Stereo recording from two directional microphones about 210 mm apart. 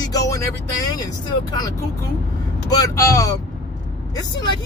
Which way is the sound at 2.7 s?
15° left (ahead or behind).